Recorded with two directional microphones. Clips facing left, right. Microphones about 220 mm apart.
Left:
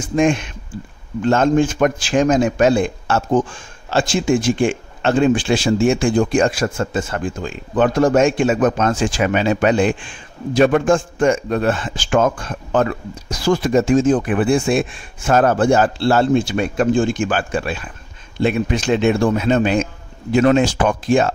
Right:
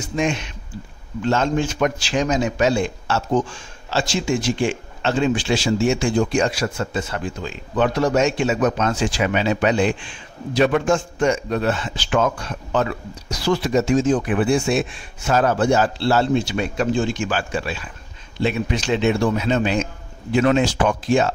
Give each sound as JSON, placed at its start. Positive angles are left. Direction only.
{"t": 0.0, "sound": "a man's voice", "side_deg": 50}